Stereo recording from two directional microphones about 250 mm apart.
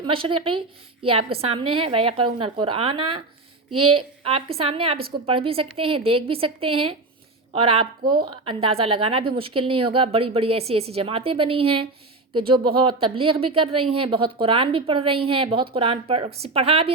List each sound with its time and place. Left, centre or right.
0.0 s a woman's voice: right
3.7 s speech: right
4.2 s a woman's voice: right